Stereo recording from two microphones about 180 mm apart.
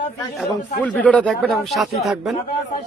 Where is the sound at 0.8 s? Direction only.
10° left (ahead or behind).